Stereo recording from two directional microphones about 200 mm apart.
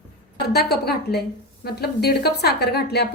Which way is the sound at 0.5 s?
50° left (ahead or behind).